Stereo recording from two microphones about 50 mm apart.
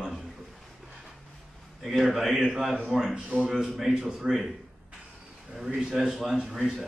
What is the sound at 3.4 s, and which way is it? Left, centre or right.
Speech, centre.